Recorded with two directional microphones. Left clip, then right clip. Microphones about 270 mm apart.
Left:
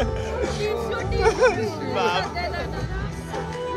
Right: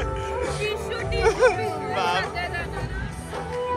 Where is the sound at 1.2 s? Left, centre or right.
Centre.